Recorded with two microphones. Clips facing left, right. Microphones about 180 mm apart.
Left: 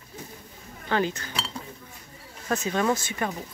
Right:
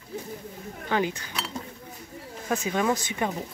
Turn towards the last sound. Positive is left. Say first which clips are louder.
# even
turn(degrees=-15)  # may be behind; listen again after turning